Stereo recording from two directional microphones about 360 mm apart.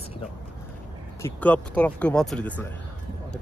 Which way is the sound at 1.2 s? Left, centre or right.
Centre.